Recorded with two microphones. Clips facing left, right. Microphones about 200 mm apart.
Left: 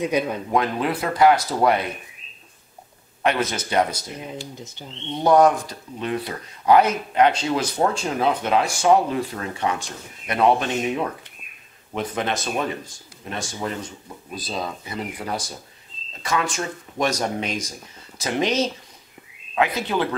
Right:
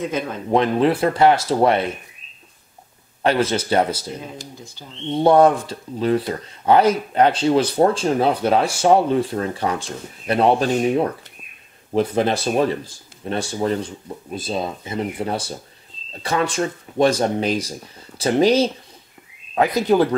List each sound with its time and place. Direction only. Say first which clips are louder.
0.0 s speech: left 2 dB; 15° left (ahead or behind)
0.5 s speech: right 10 dB; 30° right (ahead or behind)
3.2 s speech: right 4 dB; 30° right (ahead or behind)
4.6 s speech: left 1 dB; 20° left (ahead or behind)
5.1 s speech: right 3 dB; 30° right (ahead or behind)